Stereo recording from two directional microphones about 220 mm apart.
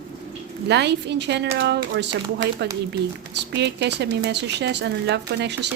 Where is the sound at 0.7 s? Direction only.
50° right (ahead or behind).